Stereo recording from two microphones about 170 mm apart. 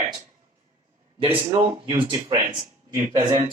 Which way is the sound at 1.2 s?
30° right (ahead or behind).